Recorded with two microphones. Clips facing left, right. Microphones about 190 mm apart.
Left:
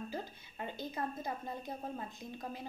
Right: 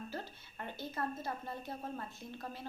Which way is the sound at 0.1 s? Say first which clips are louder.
Left 2 dB; 15° left (ahead or behind).